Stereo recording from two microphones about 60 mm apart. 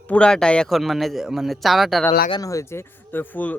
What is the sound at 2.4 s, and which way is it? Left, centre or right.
Speech, left.